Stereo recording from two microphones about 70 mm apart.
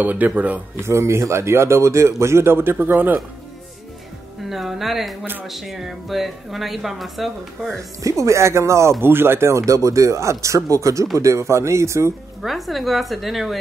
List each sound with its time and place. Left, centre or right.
0.0 s speech: right
0.7 s speech: right
4.5 s speech: centre
8.0 s speech: right
12.4 s speech: centre